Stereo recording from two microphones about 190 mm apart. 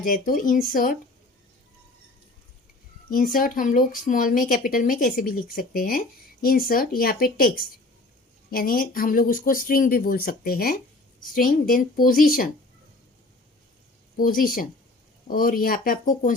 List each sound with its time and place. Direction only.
0.0 s speech: 45° left (ahead or behind)
3.1 s speech: 45° left (ahead or behind)
14.2 s speech: 50° left (ahead or behind)